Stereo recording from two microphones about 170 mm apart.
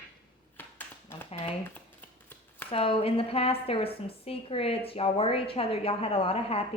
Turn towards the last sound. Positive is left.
turn(degrees=35)  # may be behind; listen again after turning